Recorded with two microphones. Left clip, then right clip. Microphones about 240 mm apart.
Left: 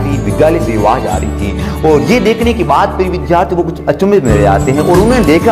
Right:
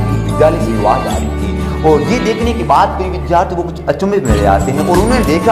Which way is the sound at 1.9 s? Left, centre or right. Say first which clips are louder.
Left 3 dB; left.